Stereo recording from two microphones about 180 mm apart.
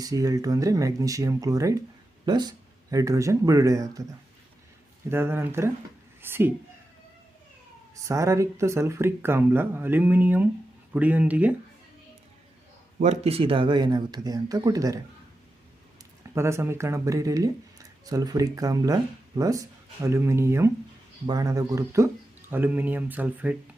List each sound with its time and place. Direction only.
0.0 s speech: 20° right (ahead or behind)
5.1 s speech: 10° right (ahead or behind)
8.0 s speech: 15° right (ahead or behind)
13.0 s speech: 35° right (ahead or behind); by 14.9 s 20° right (ahead or behind)
16.3 s speech: 15° right (ahead or behind)